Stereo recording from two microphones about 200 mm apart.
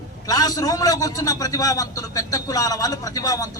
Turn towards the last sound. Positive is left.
turn(degrees=15)  # may be behind; listen again after turning